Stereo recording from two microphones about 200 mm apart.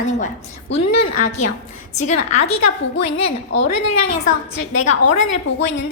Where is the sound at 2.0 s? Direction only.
35° left (ahead or behind).